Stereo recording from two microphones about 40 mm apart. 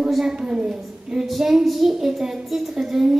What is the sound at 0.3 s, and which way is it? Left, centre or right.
Speech, right.